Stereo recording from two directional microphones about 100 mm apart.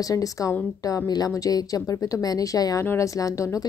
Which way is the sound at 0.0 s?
35° left (ahead or behind).